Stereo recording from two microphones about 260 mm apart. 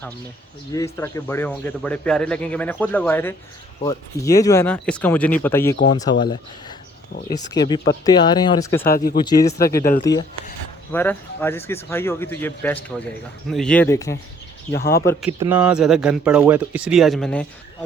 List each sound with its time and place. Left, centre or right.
0.9 s speech: centre
9.6 s speech: left
9.9 s speech: centre
15.3 s speech: centre